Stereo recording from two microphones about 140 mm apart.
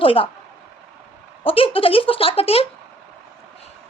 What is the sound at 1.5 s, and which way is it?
Speech, 40° left (ahead or behind).